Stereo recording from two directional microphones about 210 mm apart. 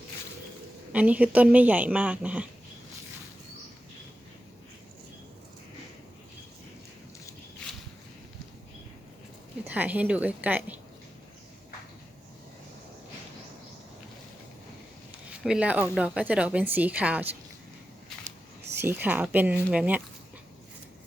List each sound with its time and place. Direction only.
0.9 s a woman's voice: 5° right (ahead or behind)
9.6 s a woman's voice: 5° right (ahead or behind)
15.3 s a woman's voice: 5° right (ahead or behind)
18.8 s a woman's voice: 10° right (ahead or behind)